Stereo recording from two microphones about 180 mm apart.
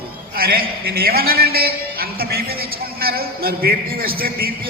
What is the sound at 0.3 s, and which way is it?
A man's voice, 55° right (ahead or behind).